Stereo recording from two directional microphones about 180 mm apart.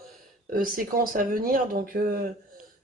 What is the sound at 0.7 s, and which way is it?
Speech, 50° right (ahead or behind).